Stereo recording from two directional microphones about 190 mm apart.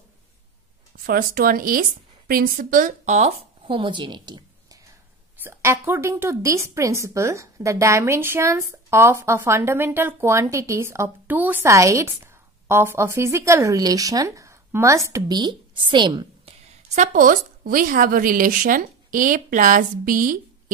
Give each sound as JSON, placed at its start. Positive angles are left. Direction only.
{"t": 1.0, "sound": "a woman's voice", "side_deg": -50}
{"t": 5.4, "sound": "a woman's voice", "side_deg": -15}
{"t": 16.9, "sound": "a woman's voice", "side_deg": -40}